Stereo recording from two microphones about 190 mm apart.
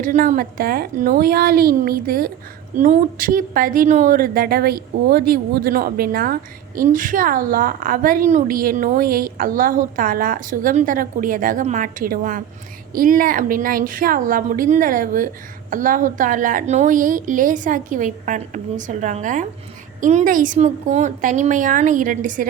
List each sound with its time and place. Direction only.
0.0 s a woman's voice: 45° right (ahead or behind)